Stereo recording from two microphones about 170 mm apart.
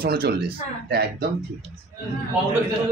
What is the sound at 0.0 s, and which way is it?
Speech, 65° right (ahead or behind).